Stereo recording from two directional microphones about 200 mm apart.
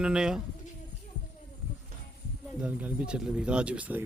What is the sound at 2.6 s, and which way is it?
Speech, 5° right (ahead or behind).